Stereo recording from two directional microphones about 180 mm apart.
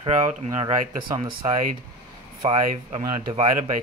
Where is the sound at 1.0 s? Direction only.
25° right (ahead or behind).